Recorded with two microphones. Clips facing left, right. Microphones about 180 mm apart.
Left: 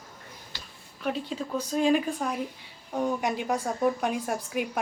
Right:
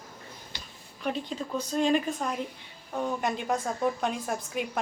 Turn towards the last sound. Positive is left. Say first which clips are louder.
# left 2 dB
turn(degrees=10)  # may be behind; listen again after turning